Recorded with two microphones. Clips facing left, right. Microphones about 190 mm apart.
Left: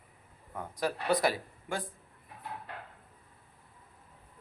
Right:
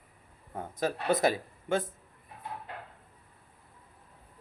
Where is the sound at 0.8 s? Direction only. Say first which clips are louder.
Right 2 dB; 25° right (ahead or behind).